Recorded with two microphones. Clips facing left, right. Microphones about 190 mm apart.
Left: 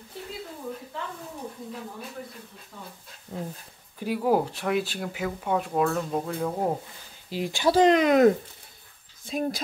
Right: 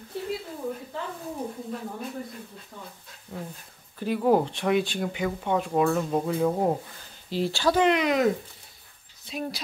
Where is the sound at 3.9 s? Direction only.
10° left (ahead or behind).